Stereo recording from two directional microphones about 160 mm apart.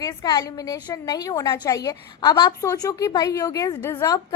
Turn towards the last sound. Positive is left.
turn(degrees=20)  # may be behind; listen again after turning